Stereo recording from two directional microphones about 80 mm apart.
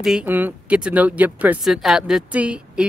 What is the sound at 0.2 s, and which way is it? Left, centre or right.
Speech, right.